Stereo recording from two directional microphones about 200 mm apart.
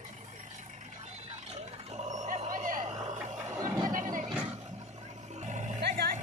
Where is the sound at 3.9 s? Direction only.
40° right (ahead or behind).